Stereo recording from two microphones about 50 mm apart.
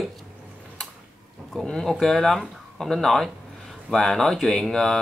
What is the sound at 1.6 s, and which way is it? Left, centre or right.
Speech, centre.